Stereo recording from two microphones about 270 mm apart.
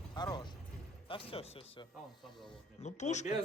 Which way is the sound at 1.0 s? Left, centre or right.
Centre.